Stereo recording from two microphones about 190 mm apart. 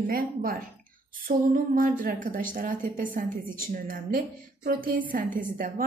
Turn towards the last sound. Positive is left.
turn(degrees=-45)  # may be behind; listen again after turning